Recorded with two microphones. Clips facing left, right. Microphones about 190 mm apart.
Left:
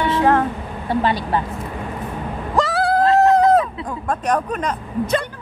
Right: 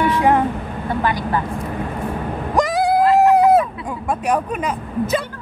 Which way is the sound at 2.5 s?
15° right (ahead or behind).